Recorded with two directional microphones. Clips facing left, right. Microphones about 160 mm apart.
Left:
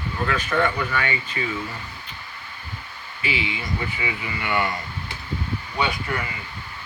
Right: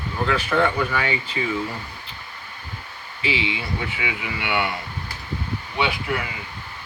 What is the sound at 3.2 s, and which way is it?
Speech, 20° right (ahead or behind).